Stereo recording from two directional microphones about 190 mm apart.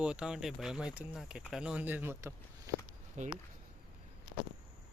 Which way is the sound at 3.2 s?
40° right (ahead or behind).